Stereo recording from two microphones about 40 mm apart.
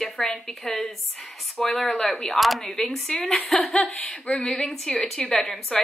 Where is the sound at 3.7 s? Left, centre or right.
Centre.